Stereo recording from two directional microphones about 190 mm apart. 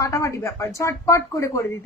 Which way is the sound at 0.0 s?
15° left (ahead or behind).